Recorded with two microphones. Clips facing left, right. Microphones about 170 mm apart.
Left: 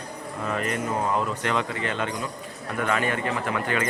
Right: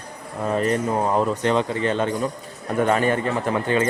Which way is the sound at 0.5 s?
35° right (ahead or behind).